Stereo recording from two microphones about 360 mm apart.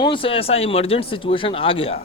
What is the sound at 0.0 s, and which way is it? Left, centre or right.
A man's voice, centre.